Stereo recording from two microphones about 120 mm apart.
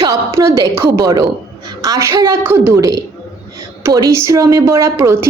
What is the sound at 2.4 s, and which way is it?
A woman's voice, 20° right (ahead or behind).